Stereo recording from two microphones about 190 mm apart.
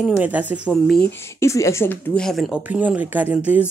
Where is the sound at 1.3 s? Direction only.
15° left (ahead or behind).